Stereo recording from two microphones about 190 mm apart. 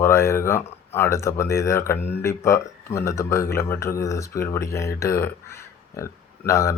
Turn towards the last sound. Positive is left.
turn(degrees=15)  # may be behind; listen again after turning